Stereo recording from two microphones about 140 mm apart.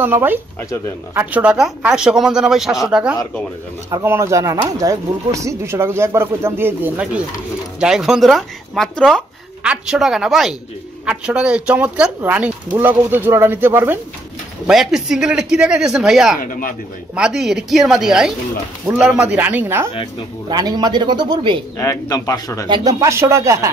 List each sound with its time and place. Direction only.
0.0 s speech: 15° right (ahead or behind)
3.9 s speech: 20° right (ahead or behind)
14.7 s speech: 5° right (ahead or behind)
16.3 s speech: 75° left (ahead or behind)
17.1 s speech: 5° right (ahead or behind)
20.4 s a man's voice: 30° right (ahead or behind)
21.7 s speech: 20° left (ahead or behind)
22.7 s speech: 25° right (ahead or behind)